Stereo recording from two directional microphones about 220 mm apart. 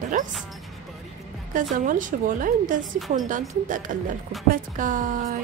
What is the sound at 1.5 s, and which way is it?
A woman's voice, 35° right (ahead or behind).